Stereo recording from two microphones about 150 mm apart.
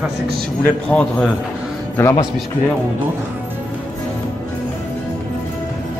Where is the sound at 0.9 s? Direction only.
15° left (ahead or behind).